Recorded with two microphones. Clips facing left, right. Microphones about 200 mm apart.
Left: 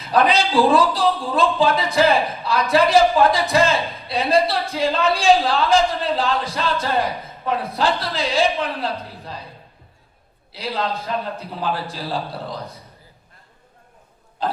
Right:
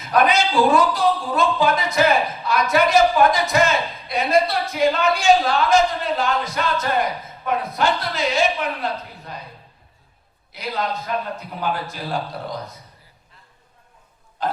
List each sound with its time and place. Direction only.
0.0 s speech: 30° left (ahead or behind)
10.5 s speech: 30° left (ahead or behind)
14.4 s pig: 30° left (ahead or behind)